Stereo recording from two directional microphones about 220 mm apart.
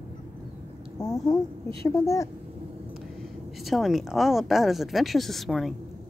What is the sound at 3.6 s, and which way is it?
A woman's voice, centre (ahead or behind).